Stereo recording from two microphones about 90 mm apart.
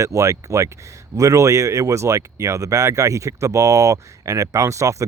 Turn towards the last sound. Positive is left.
turn(degrees=-35)  # may be behind; listen again after turning